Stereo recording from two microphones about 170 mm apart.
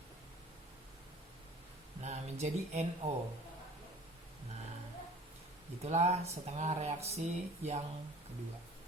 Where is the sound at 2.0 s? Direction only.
40° right (ahead or behind).